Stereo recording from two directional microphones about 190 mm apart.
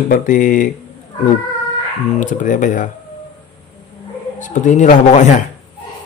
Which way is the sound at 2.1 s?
45° left (ahead or behind).